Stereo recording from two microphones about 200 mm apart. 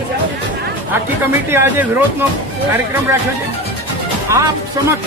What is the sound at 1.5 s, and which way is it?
Speech, 10° right (ahead or behind).